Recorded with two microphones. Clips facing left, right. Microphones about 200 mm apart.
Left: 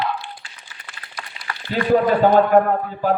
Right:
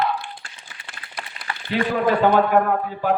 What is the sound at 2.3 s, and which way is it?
Speech, 40° left (ahead or behind).